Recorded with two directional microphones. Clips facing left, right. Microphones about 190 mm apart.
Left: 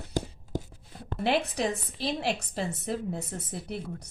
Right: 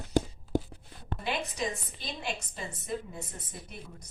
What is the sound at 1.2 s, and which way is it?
A woman's voice, 70° left (ahead or behind).